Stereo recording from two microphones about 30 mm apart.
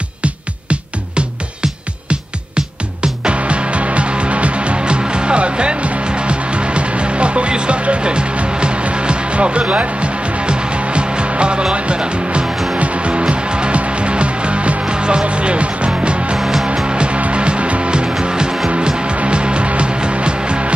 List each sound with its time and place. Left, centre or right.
0.2 s music: right
1.6 s music: right
11.7 s speech: right
12.7 s music: right
14.9 s music: right
16.3 s music: centre
16.8 s music: right